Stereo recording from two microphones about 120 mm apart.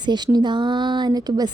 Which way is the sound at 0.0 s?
40° right (ahead or behind).